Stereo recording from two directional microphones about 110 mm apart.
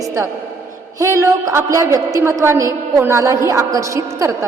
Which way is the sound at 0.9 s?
30° right (ahead or behind).